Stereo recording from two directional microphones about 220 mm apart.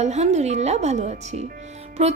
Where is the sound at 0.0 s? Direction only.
30° right (ahead or behind).